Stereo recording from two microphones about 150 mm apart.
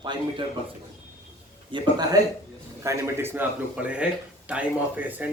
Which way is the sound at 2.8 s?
15° right (ahead or behind).